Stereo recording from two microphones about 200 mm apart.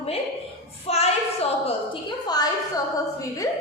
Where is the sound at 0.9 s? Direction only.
30° left (ahead or behind); by 3.5 s 15° left (ahead or behind).